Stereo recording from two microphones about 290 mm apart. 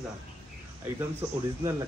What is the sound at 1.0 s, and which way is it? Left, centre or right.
Speech, centre.